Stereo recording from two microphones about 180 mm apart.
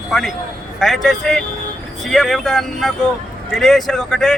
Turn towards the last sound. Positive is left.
turn(degrees=0)  # may be behind; listen again after turning